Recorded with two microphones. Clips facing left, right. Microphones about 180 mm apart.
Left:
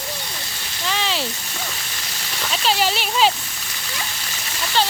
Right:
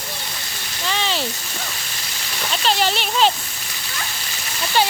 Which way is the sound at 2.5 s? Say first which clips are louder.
Right 1 dB; 5° left (ahead or behind).